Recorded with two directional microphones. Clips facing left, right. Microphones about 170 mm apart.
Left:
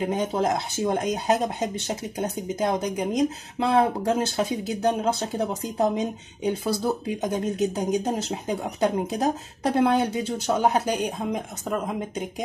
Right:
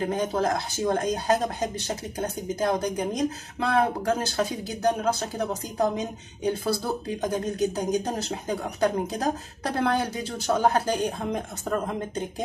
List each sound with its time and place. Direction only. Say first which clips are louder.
0.0 s speech: left 1 dB; 20° left (ahead or behind)